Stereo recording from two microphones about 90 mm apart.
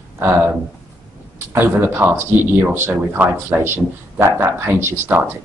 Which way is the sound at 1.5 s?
25° right (ahead or behind).